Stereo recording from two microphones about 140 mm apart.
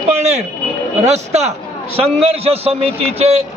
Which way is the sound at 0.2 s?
50° right (ahead or behind).